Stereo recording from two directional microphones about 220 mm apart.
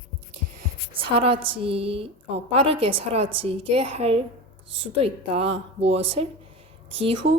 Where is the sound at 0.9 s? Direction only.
25° right (ahead or behind).